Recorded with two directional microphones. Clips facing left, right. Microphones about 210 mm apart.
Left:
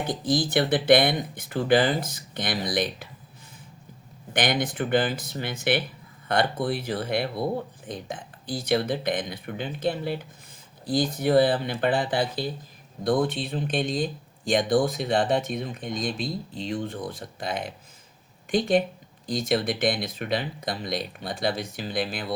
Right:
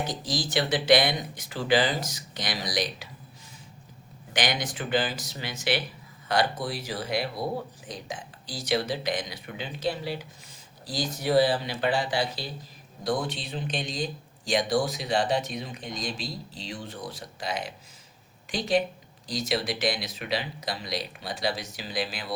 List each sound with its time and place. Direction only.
0.0 s speech: 55° left (ahead or behind)
4.4 s speech: 55° left (ahead or behind)